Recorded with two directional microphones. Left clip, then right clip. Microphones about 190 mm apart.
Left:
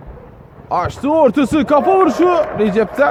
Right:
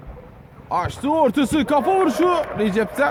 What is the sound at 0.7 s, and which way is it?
Speech, 5° left (ahead or behind).